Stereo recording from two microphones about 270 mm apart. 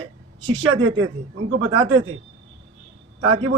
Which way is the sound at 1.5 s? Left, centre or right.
Right.